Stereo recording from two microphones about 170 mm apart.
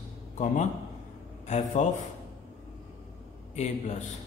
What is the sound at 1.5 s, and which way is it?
Speech, 45° left (ahead or behind).